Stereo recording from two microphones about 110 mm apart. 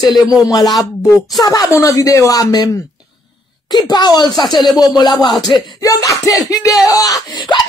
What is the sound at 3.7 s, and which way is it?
Speech, 40° left (ahead or behind).